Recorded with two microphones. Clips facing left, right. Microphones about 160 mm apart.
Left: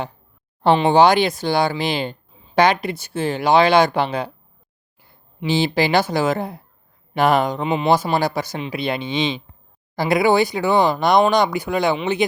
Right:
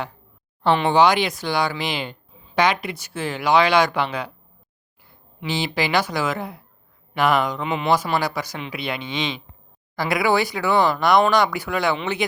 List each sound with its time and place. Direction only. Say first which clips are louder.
0.6 s speech: left 3 dB; 30° left (ahead or behind)
5.4 s speech: left 6 dB; 30° left (ahead or behind)